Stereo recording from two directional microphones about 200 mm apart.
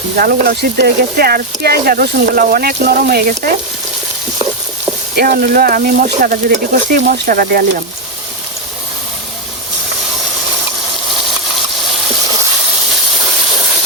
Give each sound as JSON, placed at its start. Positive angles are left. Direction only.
{"t": 0.2, "sound": "speech", "side_deg": -50}
{"t": 5.1, "sound": "speech", "side_deg": -50}